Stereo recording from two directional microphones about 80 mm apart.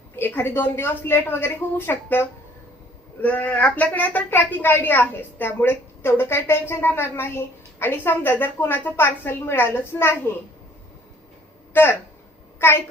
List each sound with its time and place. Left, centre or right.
0.2 s speech: left
11.7 s speech: left
12.5 s a sound: left